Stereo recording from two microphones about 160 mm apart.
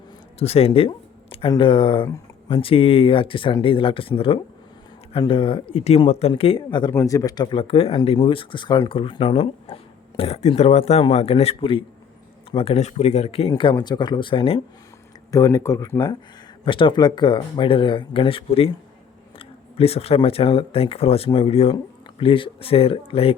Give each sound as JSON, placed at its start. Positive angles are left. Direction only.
{"t": 0.3, "sound": "speech", "side_deg": 40}
{"t": 5.1, "sound": "speech", "side_deg": 30}
{"t": 13.5, "sound": "speech", "side_deg": 30}
{"t": 15.3, "sound": "speech", "side_deg": 20}
{"t": 16.6, "sound": "speech", "side_deg": 30}